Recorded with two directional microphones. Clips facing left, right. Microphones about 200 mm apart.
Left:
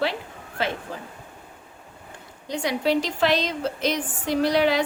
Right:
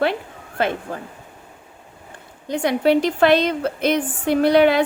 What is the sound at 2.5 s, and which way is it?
A woman's voice, 55° right (ahead or behind).